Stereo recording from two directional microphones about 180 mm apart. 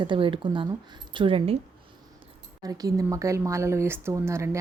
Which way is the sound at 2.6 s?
20° right (ahead or behind).